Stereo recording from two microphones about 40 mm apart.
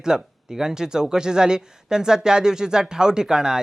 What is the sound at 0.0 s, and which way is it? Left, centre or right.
Speech, centre.